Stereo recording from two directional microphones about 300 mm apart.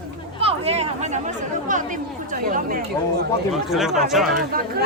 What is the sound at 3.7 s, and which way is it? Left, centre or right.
Speech, centre.